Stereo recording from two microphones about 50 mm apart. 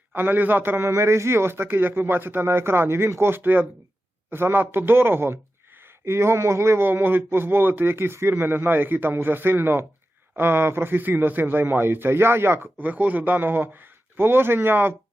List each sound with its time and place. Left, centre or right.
0.1 s a man's voice: right
0.9 s a man's voice: right
6.1 s speech: right
6.8 s a man's voice: right
12.8 s a man's voice: right